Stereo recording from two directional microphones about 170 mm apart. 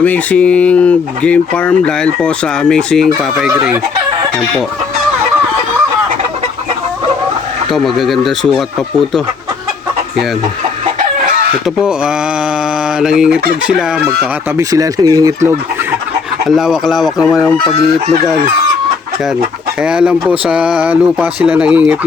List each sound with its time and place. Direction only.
0.0 s speech: 10° left (ahead or behind)
3.2 s fowl: 5° right (ahead or behind)
7.7 s fowl: centre (ahead or behind)
11.6 s fowl: 5° right (ahead or behind)
14.5 s speech: 20° right (ahead or behind)
16.5 s fowl: 5° right (ahead or behind)
19.8 s fowl: 5° right (ahead or behind)
20.4 s speech: 5° right (ahead or behind)